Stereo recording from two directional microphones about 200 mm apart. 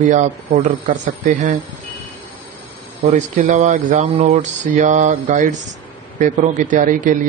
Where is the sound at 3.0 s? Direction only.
35° right (ahead or behind).